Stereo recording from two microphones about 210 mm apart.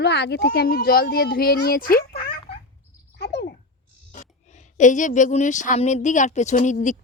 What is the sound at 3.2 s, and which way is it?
Cricket, 55° left (ahead or behind).